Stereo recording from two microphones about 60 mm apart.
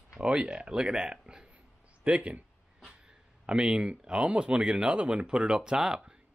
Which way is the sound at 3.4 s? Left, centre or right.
Centre.